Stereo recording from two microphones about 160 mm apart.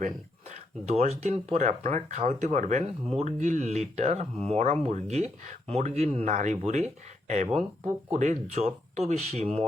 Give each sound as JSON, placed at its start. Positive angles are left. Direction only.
{"t": 0.9, "sound": "speech", "side_deg": -40}